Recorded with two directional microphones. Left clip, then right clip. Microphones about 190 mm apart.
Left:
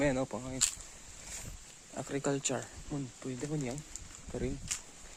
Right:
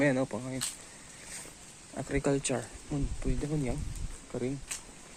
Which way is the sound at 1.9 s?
15° left (ahead or behind).